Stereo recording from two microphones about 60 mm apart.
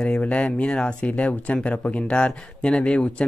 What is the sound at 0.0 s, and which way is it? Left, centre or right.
Speech, centre.